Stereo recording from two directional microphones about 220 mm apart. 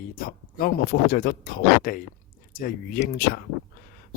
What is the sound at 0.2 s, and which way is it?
Speech, 40° left (ahead or behind).